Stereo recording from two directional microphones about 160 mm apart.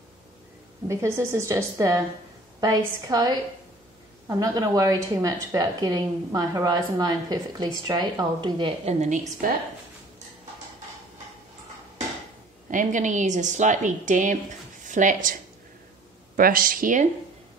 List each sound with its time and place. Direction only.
0.8 s a woman's voice: 15° right (ahead or behind)
9.0 s a woman's voice: 50° right (ahead or behind)
12.6 s a woman's voice: 55° right (ahead or behind)
16.3 s a woman's voice: 65° right (ahead or behind)